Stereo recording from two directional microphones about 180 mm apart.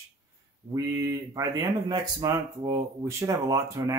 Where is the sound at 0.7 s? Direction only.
15° right (ahead or behind).